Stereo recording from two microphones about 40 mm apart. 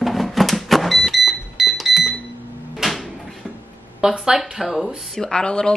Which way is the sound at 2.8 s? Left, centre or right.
Centre.